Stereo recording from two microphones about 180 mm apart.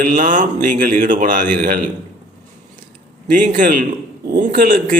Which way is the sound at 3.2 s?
50° right (ahead or behind).